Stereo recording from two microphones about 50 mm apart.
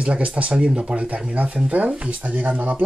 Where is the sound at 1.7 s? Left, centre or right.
Right.